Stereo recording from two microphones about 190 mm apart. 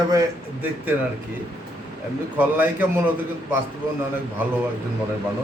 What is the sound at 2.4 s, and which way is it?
Speech, 10° right (ahead or behind).